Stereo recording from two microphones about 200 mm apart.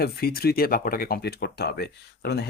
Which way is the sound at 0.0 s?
50° left (ahead or behind).